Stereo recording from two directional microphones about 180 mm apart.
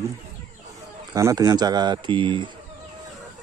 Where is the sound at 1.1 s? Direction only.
20° right (ahead or behind).